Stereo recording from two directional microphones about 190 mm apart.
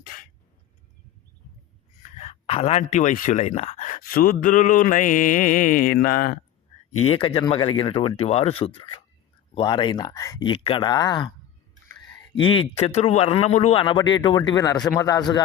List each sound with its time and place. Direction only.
0.0 s music: 50° left (ahead or behind)
2.0 s speech: 35° left (ahead or behind)
7.1 s speech: 25° left (ahead or behind)
12.4 s speech: 25° left (ahead or behind)